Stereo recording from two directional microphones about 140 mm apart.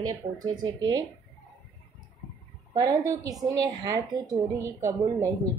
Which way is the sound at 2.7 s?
25° right (ahead or behind).